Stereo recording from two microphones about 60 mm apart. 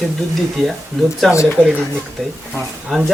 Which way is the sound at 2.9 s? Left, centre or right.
Centre.